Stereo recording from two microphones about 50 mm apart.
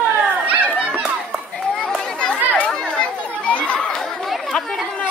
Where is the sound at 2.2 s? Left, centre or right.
Centre.